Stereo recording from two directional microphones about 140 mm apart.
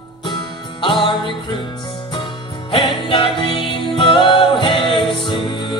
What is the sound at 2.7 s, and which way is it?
Music, 40° left (ahead or behind).